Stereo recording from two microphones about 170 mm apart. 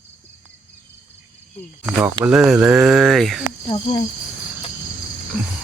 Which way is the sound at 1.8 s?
5° right (ahead or behind).